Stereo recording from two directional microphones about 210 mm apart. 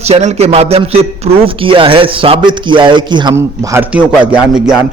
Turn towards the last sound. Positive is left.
turn(degrees=-5)  # may be behind; listen again after turning